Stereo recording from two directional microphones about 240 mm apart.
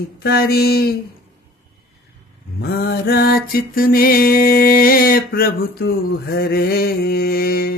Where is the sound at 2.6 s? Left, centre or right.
Left.